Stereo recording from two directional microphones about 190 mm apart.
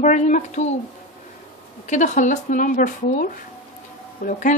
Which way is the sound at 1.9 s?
40° left (ahead or behind).